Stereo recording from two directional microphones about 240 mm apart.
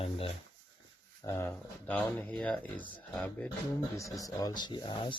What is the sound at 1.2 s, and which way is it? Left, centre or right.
Speech, centre.